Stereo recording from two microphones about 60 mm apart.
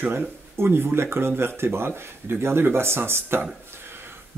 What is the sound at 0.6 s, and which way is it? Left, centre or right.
Speech, right.